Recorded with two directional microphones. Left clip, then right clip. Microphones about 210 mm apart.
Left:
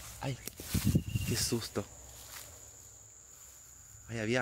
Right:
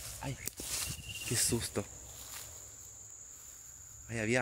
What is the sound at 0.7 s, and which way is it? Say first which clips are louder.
Snake: left 6 dB; 15° left (ahead or behind).